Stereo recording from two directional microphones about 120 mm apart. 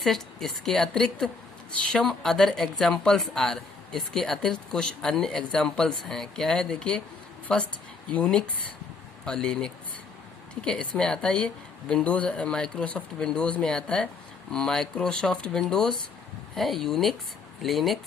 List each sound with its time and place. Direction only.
0.0 s speech: centre (ahead or behind)